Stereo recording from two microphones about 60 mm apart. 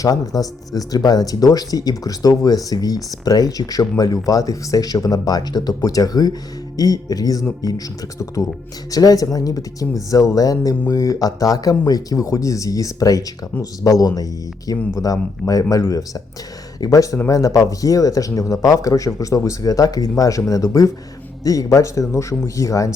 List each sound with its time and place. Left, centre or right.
0.0 s speech: left
8.4 s speech: left
8.9 s speech: left
10.8 s speech: left
16.8 s a man's voice: left